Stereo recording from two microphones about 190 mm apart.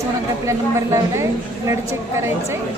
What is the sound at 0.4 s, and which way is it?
A woman's voice, 15° right (ahead or behind).